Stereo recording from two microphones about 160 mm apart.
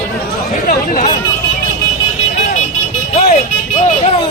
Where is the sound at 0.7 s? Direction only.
50° left (ahead or behind).